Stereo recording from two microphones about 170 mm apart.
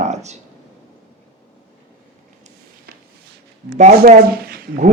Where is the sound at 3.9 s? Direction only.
60° right (ahead or behind).